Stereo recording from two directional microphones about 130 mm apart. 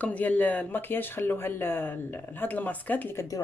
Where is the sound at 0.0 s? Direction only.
10° left (ahead or behind).